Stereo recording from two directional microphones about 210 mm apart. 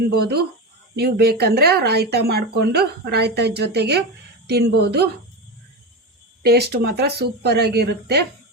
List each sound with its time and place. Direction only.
0.2 s speech: 50° right (ahead or behind)
6.4 s speech: 50° right (ahead or behind)